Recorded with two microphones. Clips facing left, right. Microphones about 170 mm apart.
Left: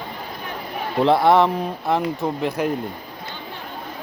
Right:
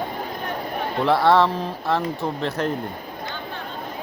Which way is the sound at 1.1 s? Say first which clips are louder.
Left 2 dB; 20° left (ahead or behind).